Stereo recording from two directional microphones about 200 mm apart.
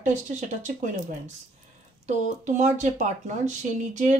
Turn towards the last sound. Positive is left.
turn(degrees=-35)  # may be behind; listen again after turning